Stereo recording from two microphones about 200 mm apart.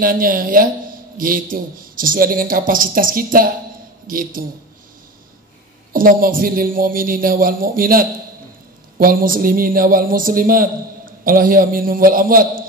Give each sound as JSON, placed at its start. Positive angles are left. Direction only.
{"t": 0.0, "sound": "speech", "side_deg": -45}
{"t": 5.9, "sound": "speech", "side_deg": -45}